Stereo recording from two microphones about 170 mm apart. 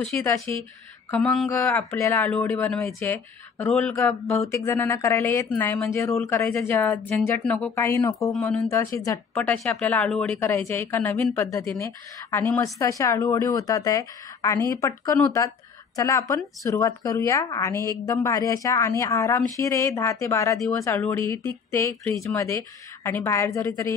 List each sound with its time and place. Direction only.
0.5 s speech: 10° left (ahead or behind)
4.5 s speech: 15° left (ahead or behind)
8.3 s speech: 5° left (ahead or behind)
8.6 s speech: 20° left (ahead or behind)